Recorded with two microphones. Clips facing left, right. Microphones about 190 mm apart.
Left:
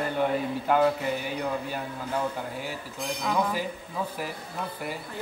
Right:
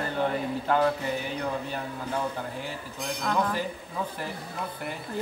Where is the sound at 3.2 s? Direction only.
5° left (ahead or behind).